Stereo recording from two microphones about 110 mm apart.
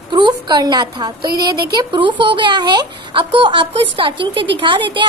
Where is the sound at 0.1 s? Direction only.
45° right (ahead or behind).